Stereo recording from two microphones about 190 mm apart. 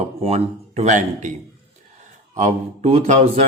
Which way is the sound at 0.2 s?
35° right (ahead or behind).